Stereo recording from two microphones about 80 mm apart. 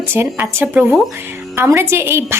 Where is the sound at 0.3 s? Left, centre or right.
Centre.